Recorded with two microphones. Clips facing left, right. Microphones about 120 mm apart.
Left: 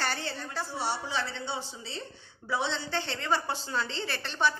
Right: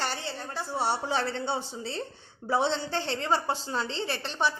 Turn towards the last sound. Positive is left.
turn(degrees=-25)  # may be behind; listen again after turning